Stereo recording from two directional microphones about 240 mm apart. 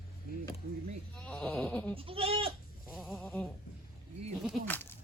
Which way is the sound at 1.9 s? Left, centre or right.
Right.